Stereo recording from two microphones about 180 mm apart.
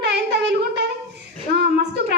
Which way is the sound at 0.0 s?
70° right (ahead or behind).